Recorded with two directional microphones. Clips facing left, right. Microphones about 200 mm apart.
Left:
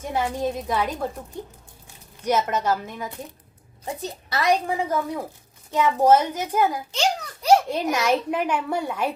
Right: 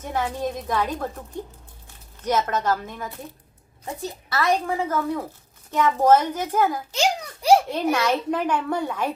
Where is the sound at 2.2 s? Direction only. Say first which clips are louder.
Even; 10° left (ahead or behind).